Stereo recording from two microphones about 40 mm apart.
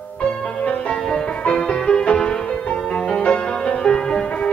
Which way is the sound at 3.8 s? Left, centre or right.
Centre.